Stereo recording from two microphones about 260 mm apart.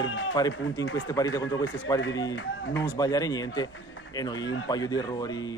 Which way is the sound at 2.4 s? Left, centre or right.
Left.